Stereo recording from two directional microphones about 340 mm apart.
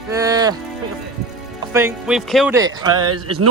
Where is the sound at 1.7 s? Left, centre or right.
Centre.